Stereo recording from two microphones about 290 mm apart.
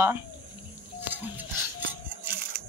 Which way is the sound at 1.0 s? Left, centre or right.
Centre.